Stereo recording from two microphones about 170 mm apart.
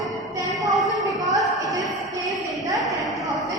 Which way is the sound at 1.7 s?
Centre (ahead or behind).